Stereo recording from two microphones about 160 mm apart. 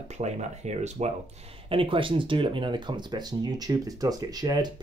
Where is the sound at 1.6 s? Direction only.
35° right (ahead or behind).